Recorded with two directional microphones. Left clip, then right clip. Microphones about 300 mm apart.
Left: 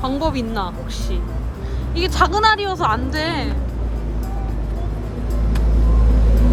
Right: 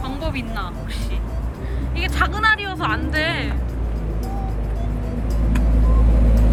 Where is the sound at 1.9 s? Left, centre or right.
Centre.